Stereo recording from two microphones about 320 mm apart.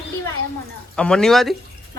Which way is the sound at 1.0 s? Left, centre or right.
Centre.